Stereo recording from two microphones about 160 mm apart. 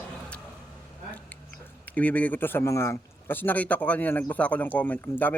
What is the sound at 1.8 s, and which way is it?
Speech, 10° left (ahead or behind).